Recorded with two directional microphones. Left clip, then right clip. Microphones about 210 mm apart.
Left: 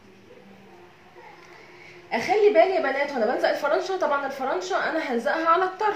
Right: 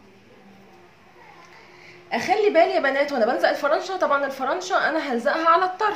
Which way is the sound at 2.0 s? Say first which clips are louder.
Even; 20° right (ahead or behind).